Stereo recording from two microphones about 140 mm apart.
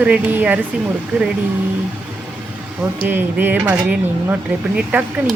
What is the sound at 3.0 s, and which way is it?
Speech, 15° right (ahead or behind).